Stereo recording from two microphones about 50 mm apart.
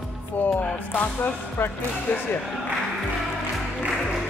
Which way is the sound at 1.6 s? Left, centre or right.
Left.